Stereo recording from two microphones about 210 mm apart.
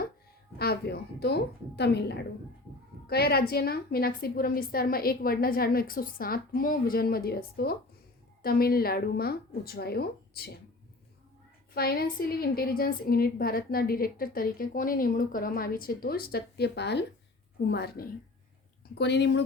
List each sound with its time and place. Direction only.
0.6 s a woman's voice: 50° left (ahead or behind)
11.7 s a woman's voice: 45° left (ahead or behind)